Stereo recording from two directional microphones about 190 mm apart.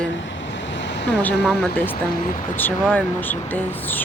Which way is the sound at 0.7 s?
70° left (ahead or behind).